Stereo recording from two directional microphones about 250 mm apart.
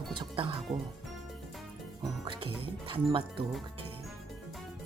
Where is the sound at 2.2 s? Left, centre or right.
Centre.